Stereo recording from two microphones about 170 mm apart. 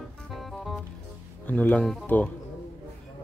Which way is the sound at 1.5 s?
10° left (ahead or behind).